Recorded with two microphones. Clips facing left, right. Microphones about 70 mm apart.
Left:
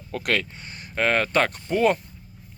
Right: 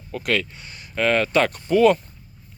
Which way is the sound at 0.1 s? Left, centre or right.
Left.